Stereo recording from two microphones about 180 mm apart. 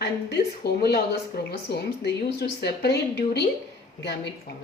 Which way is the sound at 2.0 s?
65° left (ahead or behind).